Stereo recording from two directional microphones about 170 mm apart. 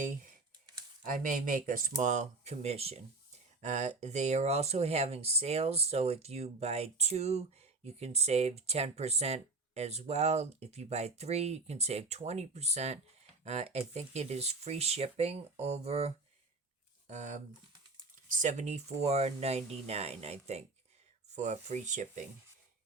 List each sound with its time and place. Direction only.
1.2 s speech: 50° right (ahead or behind)